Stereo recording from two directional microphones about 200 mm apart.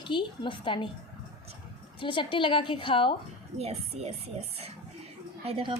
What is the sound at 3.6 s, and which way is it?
Speech, 30° right (ahead or behind).